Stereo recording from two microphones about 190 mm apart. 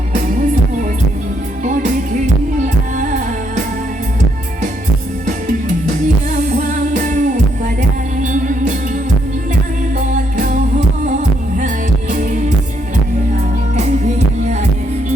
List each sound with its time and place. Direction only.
3.0 s music: 45° right (ahead or behind)
6.5 s music: 40° right (ahead or behind)
10.3 s music: 45° right (ahead or behind)